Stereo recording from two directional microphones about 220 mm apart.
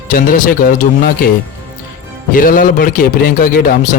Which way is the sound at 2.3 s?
40° left (ahead or behind).